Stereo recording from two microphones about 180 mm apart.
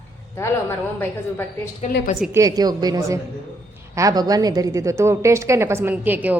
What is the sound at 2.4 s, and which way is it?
A woman's voice, 20° right (ahead or behind).